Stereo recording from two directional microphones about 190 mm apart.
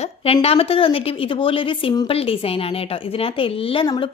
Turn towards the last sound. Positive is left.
turn(degrees=25)  # may be behind; listen again after turning